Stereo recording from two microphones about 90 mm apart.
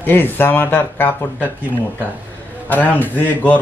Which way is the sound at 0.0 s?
25° left (ahead or behind).